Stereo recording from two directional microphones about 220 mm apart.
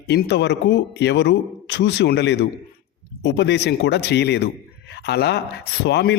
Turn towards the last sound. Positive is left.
turn(degrees=50)  # may be behind; listen again after turning